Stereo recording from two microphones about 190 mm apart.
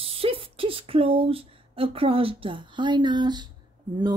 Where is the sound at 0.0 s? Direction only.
30° right (ahead or behind).